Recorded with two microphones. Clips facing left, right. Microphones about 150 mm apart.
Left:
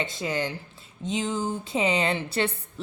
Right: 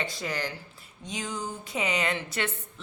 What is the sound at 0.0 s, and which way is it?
A woman's voice, 20° left (ahead or behind).